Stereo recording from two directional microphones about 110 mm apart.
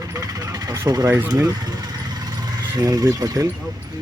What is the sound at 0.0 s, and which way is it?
Vehicle, 30° right (ahead or behind).